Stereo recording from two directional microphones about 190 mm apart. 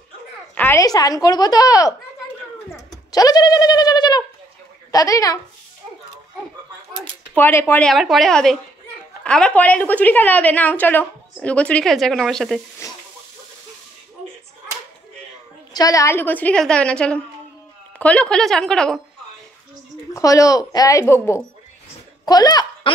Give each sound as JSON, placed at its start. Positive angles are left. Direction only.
{"t": 0.6, "sound": "speech", "side_deg": 15}
{"t": 2.7, "sound": "bird", "side_deg": 20}
{"t": 4.9, "sound": "a woman's voice", "side_deg": 20}
{"t": 7.3, "sound": "a woman's voice", "side_deg": 10}
{"t": 7.9, "sound": "a woman's voice", "side_deg": 0}
{"t": 12.8, "sound": "a sound", "side_deg": 15}
{"t": 15.7, "sound": "a woman's voice", "side_deg": 20}
{"t": 20.2, "sound": "a woman's voice", "side_deg": 15}